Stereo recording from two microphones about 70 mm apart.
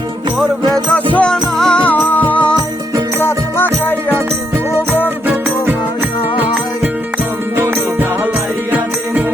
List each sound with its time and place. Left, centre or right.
0.7 s music: centre
1.8 s music: left
3.2 s music: left
5.2 s music: right
7.5 s music: right